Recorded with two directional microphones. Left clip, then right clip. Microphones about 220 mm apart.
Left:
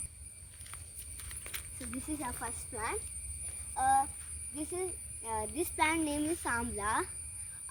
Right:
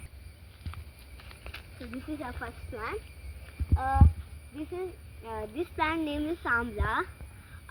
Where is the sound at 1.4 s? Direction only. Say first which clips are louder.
Right 1 dB; 25° left (ahead or behind).